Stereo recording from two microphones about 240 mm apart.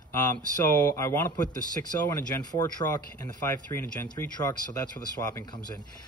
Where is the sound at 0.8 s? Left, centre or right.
Centre.